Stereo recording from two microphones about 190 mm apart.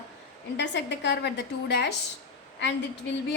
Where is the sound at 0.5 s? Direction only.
65° left (ahead or behind).